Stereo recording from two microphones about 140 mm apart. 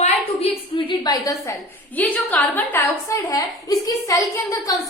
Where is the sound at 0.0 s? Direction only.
45° left (ahead or behind).